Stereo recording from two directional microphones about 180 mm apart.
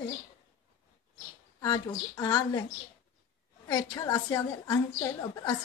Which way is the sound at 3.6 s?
20° left (ahead or behind).